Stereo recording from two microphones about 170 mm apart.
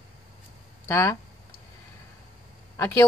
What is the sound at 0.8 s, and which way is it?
Speech, 15° left (ahead or behind).